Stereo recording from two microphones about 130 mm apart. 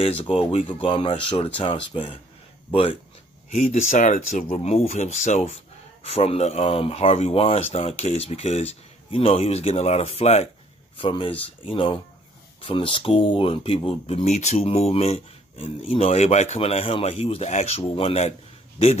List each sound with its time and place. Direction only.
0.0 s speech: 50° left (ahead or behind)
3.4 s speech: 60° left (ahead or behind)
4.5 s speech: 50° left (ahead or behind)
4.8 s speech: 60° left (ahead or behind)
6.0 s speech: 50° left (ahead or behind)
11.0 s speech: 40° left (ahead or behind); by 16.5 s 60° left (ahead or behind)
16.5 s speech: 50° left (ahead or behind)